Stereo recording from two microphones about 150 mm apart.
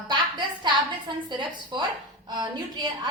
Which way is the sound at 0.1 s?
30° right (ahead or behind).